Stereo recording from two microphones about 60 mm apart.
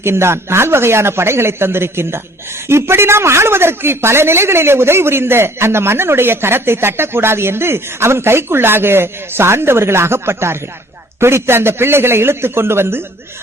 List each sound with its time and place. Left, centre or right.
0.0 s a woman's voice: right